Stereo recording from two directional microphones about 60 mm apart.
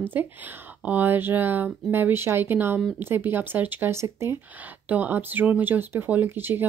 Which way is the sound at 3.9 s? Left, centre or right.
Right.